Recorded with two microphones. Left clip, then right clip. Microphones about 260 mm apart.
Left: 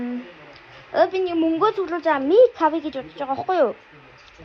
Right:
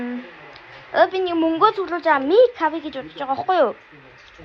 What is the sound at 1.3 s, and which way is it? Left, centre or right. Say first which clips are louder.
Speech: right 1 dB; right.